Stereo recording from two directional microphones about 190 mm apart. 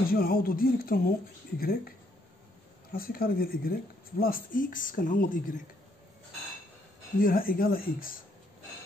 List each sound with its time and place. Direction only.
0.1 s speech: 50° left (ahead or behind)
7.2 s speech: 50° left (ahead or behind)